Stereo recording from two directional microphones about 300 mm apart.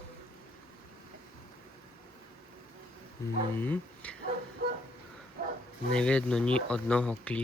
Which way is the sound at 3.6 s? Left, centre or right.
Centre.